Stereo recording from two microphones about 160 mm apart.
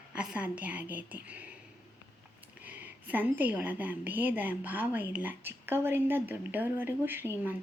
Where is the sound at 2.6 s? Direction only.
10° right (ahead or behind).